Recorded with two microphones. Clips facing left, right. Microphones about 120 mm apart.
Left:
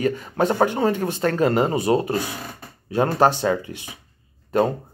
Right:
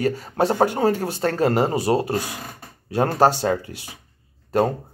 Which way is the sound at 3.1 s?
40° right (ahead or behind).